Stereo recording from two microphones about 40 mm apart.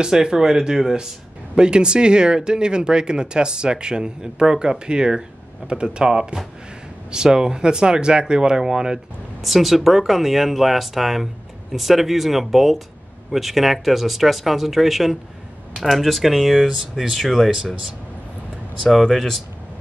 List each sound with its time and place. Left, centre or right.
0.0 s speech: centre
9.4 s speech: centre